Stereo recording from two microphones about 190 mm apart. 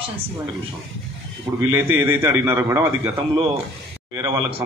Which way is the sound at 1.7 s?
10° right (ahead or behind).